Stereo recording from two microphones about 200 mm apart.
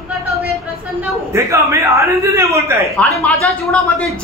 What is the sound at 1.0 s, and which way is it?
A man's voice, 15° right (ahead or behind).